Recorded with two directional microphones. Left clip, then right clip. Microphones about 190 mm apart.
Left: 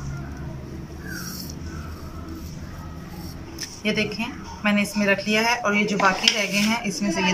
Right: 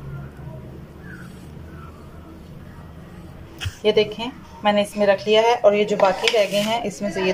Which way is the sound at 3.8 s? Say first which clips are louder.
Right 6 dB; 25° right (ahead or behind).